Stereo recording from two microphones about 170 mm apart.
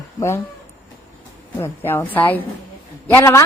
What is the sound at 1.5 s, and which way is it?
A woman's voice, 15° left (ahead or behind).